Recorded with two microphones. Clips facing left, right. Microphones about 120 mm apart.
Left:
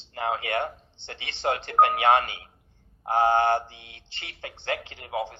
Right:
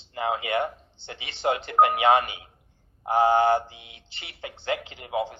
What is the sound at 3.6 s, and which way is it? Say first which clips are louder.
Speech: right 1 dB; 15° right (ahead or behind).